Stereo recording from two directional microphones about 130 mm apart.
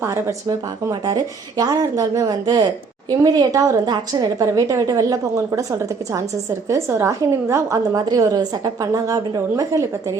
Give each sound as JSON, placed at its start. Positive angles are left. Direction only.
{"t": 0.0, "sound": "a woman's voice", "side_deg": -25}